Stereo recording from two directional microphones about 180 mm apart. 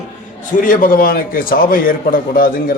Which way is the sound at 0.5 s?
50° left (ahead or behind).